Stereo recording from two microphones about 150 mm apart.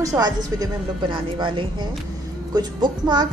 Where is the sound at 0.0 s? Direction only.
25° right (ahead or behind).